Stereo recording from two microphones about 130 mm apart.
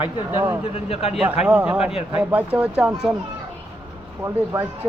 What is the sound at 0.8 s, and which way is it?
Speech, 50° left (ahead or behind).